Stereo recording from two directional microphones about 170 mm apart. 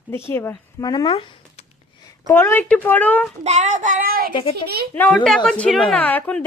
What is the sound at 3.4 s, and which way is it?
Child singing, 40° right (ahead or behind).